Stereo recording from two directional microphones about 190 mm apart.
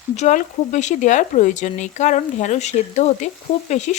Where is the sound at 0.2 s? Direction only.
40° left (ahead or behind).